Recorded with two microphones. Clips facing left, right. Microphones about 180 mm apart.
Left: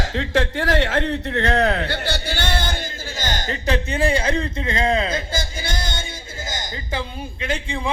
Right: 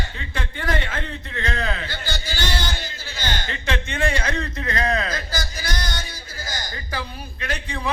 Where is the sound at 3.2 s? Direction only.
45° left (ahead or behind); by 6.0 s 25° left (ahead or behind).